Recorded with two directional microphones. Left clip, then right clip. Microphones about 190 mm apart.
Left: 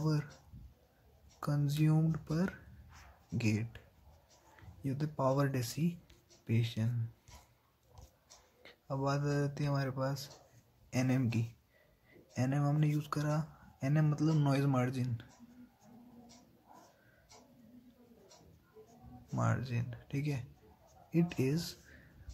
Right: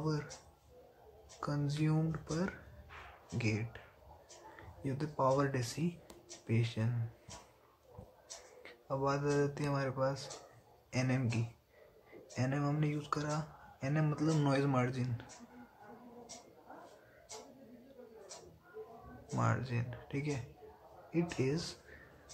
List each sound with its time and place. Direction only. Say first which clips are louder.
0.0 s speech: left 1 dB; 35° left (ahead or behind)
1.4 s speech: left 1 dB; 40° left (ahead or behind)
8.6 s speech: right 1 dB; 35° left (ahead or behind)
12.4 s speech: left 1 dB; 35° left (ahead or behind)
19.3 s speech: right 1 dB; 30° left (ahead or behind)